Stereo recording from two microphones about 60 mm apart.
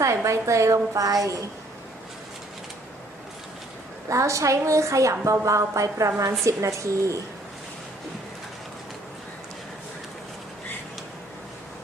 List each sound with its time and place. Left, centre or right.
0.0 s a woman's voice: right
4.1 s a woman's voice: right